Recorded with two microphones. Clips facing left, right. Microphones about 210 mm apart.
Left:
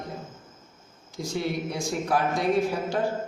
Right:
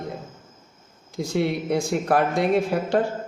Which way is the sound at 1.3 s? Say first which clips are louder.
Right 6 dB; 60° right (ahead or behind).